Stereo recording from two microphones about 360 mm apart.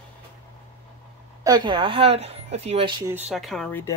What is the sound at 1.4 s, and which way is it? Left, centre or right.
Speech, centre.